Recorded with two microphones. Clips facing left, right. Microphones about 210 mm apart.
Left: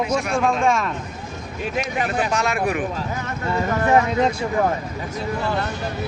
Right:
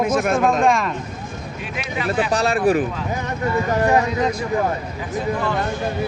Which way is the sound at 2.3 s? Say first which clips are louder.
Right 5 dB; 30° right (ahead or behind).